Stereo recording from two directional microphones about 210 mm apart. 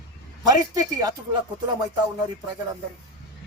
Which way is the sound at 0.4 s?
15° right (ahead or behind).